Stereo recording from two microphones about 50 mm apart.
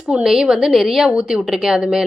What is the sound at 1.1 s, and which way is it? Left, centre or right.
Speech, centre.